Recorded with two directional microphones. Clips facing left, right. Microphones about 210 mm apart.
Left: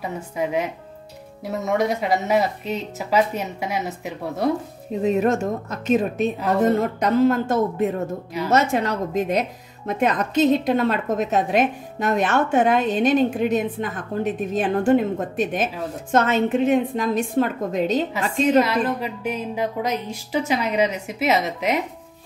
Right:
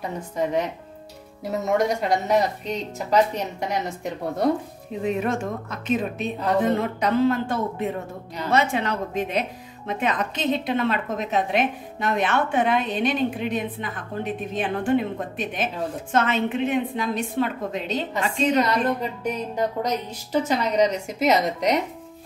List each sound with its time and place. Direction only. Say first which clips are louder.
0.0 s a woman's voice: even; 10° left (ahead or behind)
5.0 s a woman's voice: left 5 dB; 40° left (ahead or behind)
18.9 s a woman's voice: left 1 dB; 5° left (ahead or behind)